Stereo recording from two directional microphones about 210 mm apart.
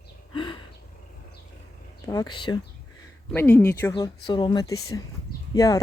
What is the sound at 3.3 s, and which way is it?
Speech, 10° left (ahead or behind).